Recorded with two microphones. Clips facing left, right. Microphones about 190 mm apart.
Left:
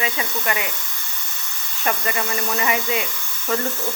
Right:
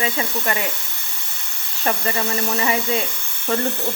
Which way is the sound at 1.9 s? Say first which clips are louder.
Right 2 dB; 30° right (ahead or behind).